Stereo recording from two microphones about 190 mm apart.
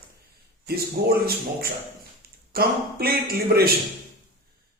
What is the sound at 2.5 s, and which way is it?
Speech, 50° right (ahead or behind).